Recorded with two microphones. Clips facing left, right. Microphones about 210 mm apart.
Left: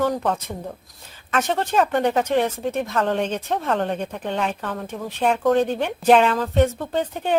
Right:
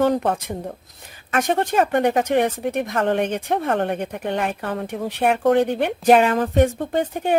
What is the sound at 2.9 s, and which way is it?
Speech, 55° right (ahead or behind).